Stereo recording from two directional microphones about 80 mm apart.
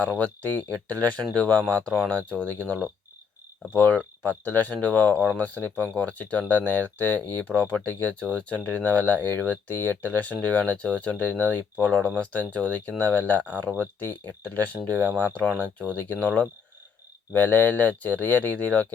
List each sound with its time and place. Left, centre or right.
0.0 s speech: centre